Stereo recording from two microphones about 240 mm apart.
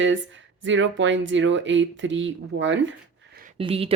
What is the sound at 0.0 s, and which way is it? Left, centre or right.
Speech, right.